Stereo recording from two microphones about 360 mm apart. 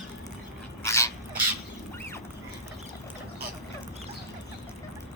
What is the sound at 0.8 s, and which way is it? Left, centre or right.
Dog, centre.